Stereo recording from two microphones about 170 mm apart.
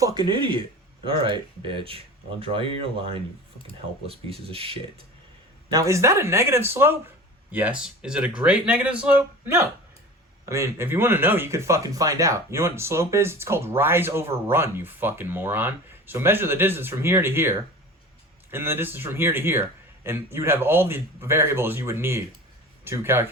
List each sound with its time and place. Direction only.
0.0 s speech: 25° right (ahead or behind)
4.0 s speech: 35° right (ahead or behind)
5.7 s speech: 20° right (ahead or behind)